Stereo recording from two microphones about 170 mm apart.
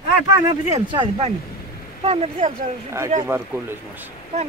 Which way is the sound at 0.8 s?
30° right (ahead or behind).